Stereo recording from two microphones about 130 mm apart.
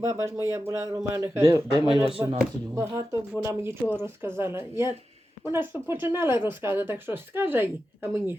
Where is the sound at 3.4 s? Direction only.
20° right (ahead or behind).